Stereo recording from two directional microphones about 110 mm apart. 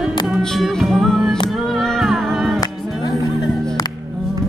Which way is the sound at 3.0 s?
40° left (ahead or behind).